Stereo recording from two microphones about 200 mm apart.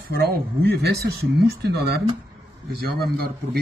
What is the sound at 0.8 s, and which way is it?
Speech, 55° right (ahead or behind).